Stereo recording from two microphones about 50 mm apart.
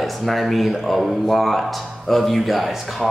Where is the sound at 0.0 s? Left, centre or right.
Centre.